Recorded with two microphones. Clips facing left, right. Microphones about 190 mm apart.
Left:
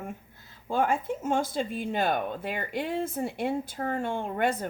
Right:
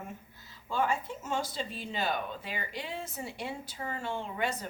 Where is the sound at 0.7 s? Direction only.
50° left (ahead or behind).